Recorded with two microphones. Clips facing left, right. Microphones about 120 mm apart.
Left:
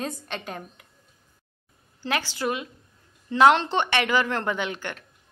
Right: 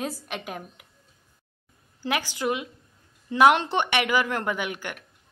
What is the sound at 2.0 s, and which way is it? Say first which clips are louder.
Speech: even; 15° right (ahead or behind).